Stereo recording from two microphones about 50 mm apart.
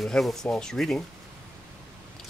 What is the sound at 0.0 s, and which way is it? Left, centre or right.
Speech, centre.